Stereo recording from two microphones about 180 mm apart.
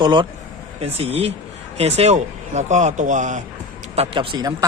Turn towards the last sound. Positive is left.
turn(degrees=-25)  # may be behind; listen again after turning